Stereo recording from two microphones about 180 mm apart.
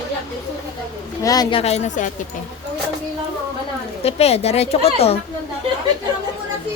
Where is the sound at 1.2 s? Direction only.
20° left (ahead or behind); by 2.0 s 40° left (ahead or behind).